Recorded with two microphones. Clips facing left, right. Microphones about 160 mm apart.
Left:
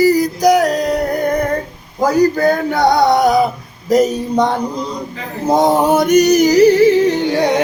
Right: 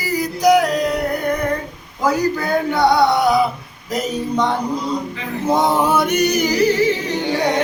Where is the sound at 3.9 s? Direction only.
40° left (ahead or behind).